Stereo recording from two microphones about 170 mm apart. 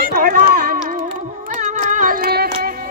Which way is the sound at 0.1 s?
55° right (ahead or behind).